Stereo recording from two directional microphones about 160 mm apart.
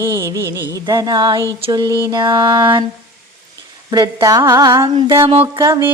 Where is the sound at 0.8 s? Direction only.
25° right (ahead or behind).